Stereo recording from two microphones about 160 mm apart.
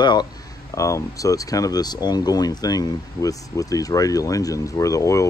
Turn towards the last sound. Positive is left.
turn(degrees=20)  # may be behind; listen again after turning